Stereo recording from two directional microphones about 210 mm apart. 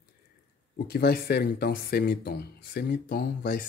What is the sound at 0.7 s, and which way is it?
Speech, 50° left (ahead or behind).